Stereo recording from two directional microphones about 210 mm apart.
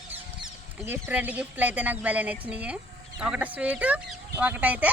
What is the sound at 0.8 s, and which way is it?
Speech, 10° right (ahead or behind).